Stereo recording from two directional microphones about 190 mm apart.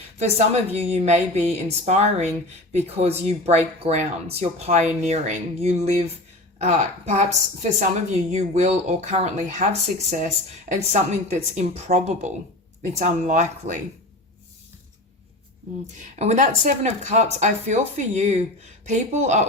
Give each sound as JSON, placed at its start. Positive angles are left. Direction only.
{"t": 0.2, "sound": "a woman's voice", "side_deg": -35}
{"t": 16.1, "sound": "a woman's voice", "side_deg": -35}